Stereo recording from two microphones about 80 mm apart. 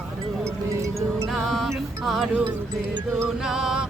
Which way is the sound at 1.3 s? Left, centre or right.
Centre.